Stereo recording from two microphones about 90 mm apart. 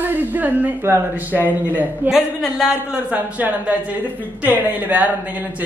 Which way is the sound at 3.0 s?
15° right (ahead or behind).